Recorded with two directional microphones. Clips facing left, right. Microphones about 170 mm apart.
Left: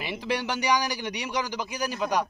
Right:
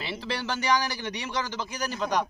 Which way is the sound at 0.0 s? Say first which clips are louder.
Left 3 dB; 15° left (ahead or behind).